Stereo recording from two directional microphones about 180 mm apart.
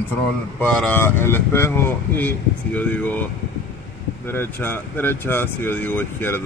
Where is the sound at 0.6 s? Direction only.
5° left (ahead or behind).